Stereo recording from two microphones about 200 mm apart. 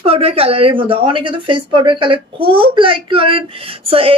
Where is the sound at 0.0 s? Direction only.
30° right (ahead or behind).